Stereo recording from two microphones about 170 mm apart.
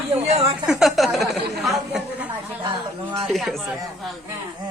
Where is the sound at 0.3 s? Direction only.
40° right (ahead or behind).